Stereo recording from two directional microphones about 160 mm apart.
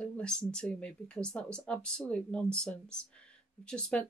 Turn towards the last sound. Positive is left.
turn(degrees=5)  # may be behind; listen again after turning